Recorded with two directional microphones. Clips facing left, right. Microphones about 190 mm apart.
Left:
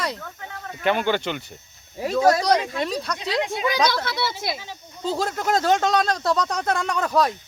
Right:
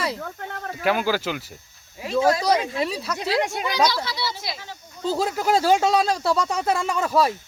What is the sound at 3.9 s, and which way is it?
Speech, 55° left (ahead or behind).